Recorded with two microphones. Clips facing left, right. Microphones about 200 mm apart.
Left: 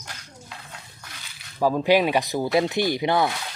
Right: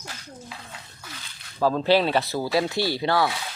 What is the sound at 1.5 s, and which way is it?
Speech, 10° left (ahead or behind).